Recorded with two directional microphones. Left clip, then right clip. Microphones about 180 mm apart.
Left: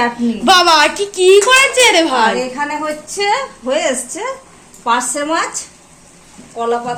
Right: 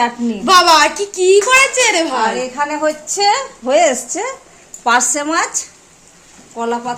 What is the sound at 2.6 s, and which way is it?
A woman's voice, 65° right (ahead or behind).